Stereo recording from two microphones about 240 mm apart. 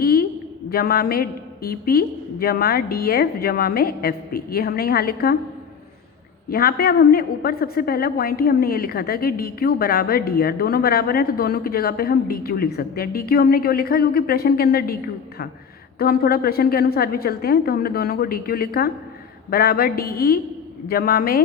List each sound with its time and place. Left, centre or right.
0.0 s a sound: left
0.7 s a woman's voice: left
6.5 s a woman's voice: left